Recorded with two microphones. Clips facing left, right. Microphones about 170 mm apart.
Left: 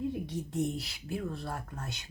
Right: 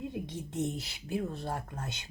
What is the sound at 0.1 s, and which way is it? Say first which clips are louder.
Speech: left 3 dB; 20° right (ahead or behind).